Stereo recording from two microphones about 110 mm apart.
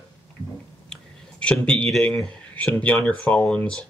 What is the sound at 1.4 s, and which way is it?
Speech, 10° left (ahead or behind).